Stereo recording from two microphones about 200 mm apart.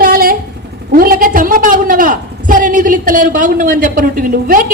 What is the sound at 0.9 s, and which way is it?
A woman's voice, 45° right (ahead or behind).